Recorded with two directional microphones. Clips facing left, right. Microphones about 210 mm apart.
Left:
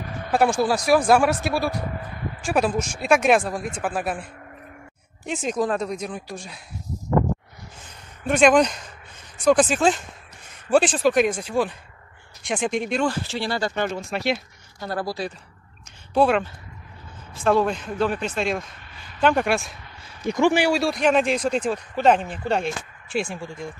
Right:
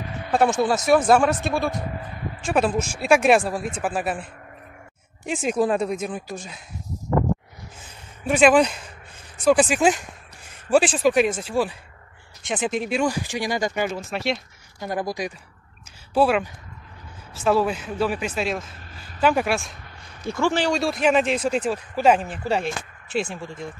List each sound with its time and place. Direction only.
0.3 s speech: centre (ahead or behind)
5.2 s speech: 5° right (ahead or behind)
7.8 s a sound: 5° right (ahead or behind)
9.4 s speech: 5° right (ahead or behind)
13.0 s speech: 15° right (ahead or behind)
14.8 s speech: 15° right (ahead or behind)
16.1 s speech: 5° right (ahead or behind)
20.2 s speech: 15° left (ahead or behind); by 23.7 s centre (ahead or behind)